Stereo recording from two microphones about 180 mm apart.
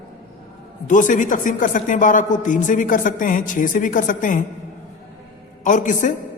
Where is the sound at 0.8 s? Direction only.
45° left (ahead or behind).